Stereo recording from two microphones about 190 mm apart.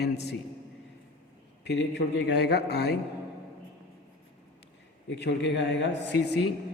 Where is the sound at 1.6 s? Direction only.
65° left (ahead or behind).